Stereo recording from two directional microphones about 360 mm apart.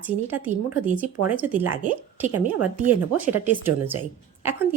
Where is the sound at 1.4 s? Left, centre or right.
Centre.